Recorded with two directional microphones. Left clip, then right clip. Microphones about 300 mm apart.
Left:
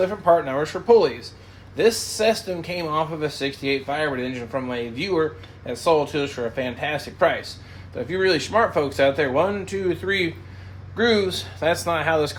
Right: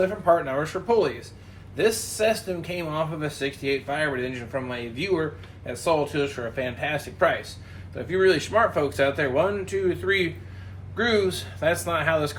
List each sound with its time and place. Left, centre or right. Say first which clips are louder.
0.0 s speech: left 3 dB; left